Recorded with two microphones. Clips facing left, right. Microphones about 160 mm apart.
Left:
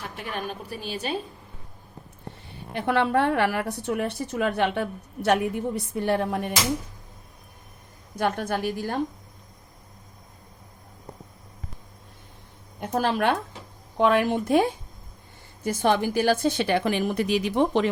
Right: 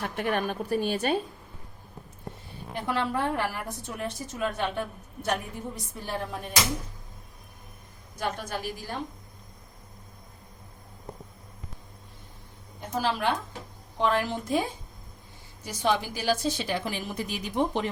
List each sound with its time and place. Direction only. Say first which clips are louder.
0.2 s a woman's voice: right 5 dB; 50° right (ahead or behind)
2.7 s a woman's voice: left 6 dB; 65° left (ahead or behind)
8.1 s a woman's voice: left 6 dB; 60° left (ahead or behind)
12.8 s a woman's voice: left 4 dB; 55° left (ahead or behind); by 17.8 s 85° left